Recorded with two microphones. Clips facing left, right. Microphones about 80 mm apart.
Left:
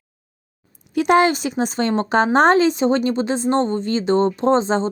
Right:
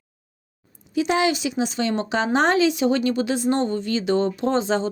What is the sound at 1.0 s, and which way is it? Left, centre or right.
Speech, left.